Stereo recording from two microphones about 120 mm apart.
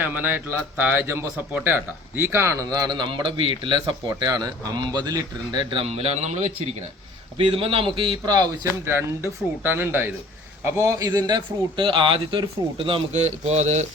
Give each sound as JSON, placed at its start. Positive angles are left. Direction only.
{"t": 0.0, "sound": "speech", "side_deg": -15}
{"t": 5.8, "sound": "speech", "side_deg": -60}
{"t": 7.3, "sound": "a man's voice", "side_deg": -50}
{"t": 8.2, "sound": "speech", "side_deg": -35}
{"t": 8.8, "sound": "a man's voice", "side_deg": -20}